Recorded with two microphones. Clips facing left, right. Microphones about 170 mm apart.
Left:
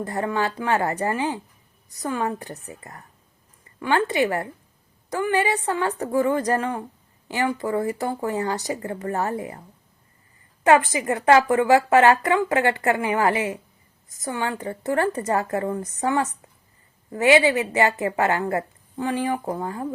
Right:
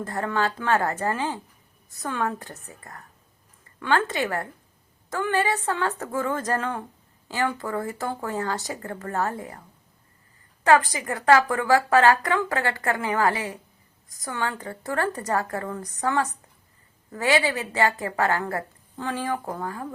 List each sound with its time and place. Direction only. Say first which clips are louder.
0.0 s a woman's voice: left 2 dB; 15° left (ahead or behind)
10.6 s speech: left 2 dB; 20° left (ahead or behind)